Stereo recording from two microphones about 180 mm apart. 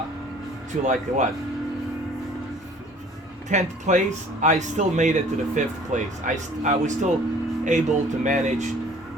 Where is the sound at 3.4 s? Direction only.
40° right (ahead or behind).